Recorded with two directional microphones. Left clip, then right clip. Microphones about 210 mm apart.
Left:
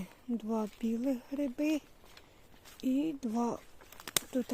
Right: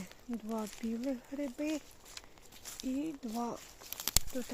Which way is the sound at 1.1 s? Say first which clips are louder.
Left 3 dB; 45° left (ahead or behind).